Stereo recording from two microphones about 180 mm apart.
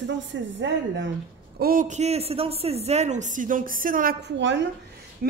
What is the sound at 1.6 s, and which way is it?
A man's voice, 50° right (ahead or behind).